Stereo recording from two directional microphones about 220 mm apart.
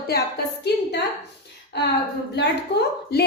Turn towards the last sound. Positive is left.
turn(degrees=50)  # may be behind; listen again after turning